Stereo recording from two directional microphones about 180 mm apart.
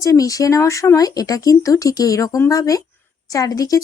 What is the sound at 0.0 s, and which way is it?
Speech, 20° left (ahead or behind).